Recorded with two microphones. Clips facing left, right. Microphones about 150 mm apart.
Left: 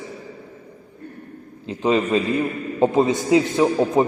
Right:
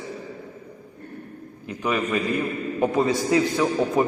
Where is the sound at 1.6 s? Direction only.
25° left (ahead or behind).